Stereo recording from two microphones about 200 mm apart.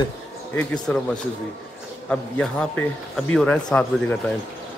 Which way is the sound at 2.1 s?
5° left (ahead or behind).